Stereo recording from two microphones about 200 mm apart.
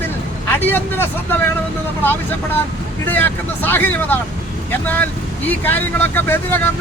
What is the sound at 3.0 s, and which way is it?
Speech, 10° left (ahead or behind).